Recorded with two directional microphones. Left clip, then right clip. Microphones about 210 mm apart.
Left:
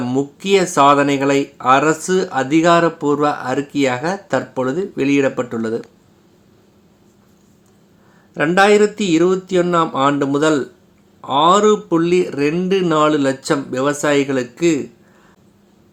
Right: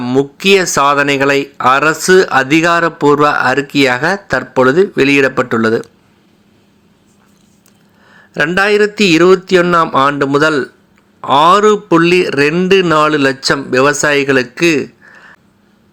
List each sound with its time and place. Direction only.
0.0 s speech: 20° right (ahead or behind)
8.3 s speech: 25° right (ahead or behind)